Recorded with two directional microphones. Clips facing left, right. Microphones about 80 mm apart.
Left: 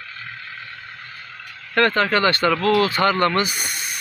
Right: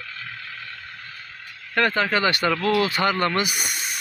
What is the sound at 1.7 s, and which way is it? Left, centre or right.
Speech, centre.